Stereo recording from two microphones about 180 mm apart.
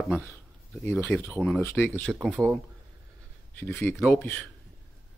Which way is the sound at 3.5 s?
10° left (ahead or behind).